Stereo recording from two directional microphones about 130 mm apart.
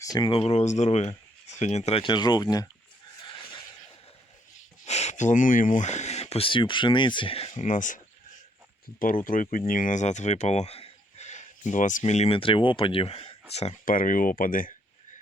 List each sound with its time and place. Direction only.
0.0 s speech: 30° left (ahead or behind)
0.3 s speech: 50° left (ahead or behind)
2.0 s speech: 35° left (ahead or behind)
3.2 s a sound: 40° left (ahead or behind)
4.5 s speech: 65° left (ahead or behind); by 7.5 s 45° left (ahead or behind)
7.5 s a sound: 70° left (ahead or behind)
9.0 s speech: 90° left; by 13.7 s 55° left (ahead or behind)
13.8 s speech: 90° left